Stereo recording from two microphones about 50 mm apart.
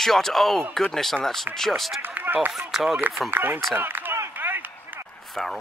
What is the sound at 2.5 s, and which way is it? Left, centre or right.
Speech, centre.